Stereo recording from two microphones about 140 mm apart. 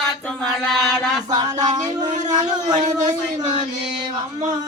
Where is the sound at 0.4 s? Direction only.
Centre (ahead or behind).